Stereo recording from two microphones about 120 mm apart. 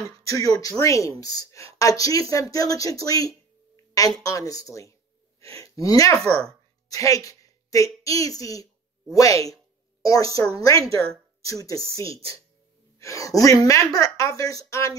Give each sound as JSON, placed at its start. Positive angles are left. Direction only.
{"t": 0.2, "sound": "a woman's voice", "side_deg": 30}
{"t": 6.1, "sound": "speech", "side_deg": 5}
{"t": 6.9, "sound": "a woman's voice", "side_deg": 30}
{"t": 13.0, "sound": "a woman's voice", "side_deg": 25}